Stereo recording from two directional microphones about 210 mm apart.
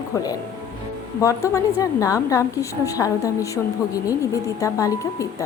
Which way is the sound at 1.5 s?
15° left (ahead or behind).